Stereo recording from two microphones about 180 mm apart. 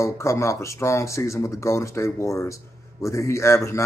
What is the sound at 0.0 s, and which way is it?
Speech, 15° left (ahead or behind).